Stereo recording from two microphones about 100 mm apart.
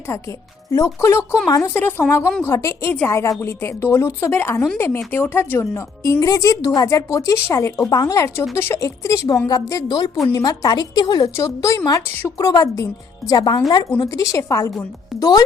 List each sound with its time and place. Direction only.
0.1 s a woman's voice: 30° left (ahead or behind)
6.1 s a woman's voice: 35° left (ahead or behind)
12.0 s a woman's voice: 20° left (ahead or behind)
12.4 s a woman's voice: 35° left (ahead or behind)